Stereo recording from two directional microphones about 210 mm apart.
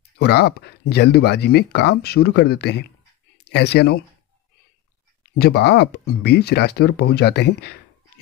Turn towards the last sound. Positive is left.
turn(degrees=50)  # may be behind; listen again after turning